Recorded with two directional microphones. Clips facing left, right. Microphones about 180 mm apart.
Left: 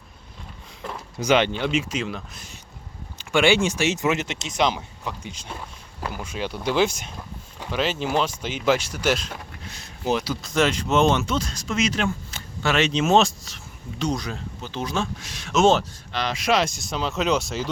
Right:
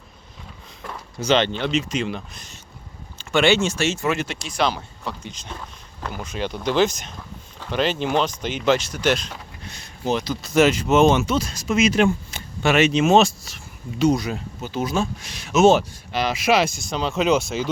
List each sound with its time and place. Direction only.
0.9 s speech: 10° left (ahead or behind)
10.4 s speech: 5° right (ahead or behind)